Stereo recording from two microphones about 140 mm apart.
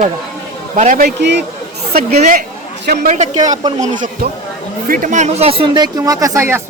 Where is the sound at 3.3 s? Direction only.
25° right (ahead or behind).